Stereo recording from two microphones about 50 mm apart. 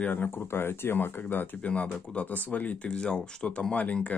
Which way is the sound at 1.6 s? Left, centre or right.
Left.